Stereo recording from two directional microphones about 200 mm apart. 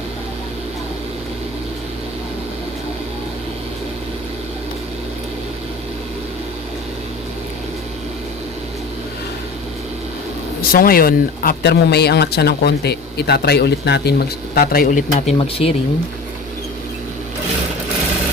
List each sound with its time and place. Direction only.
10.6 s speech: 45° left (ahead or behind)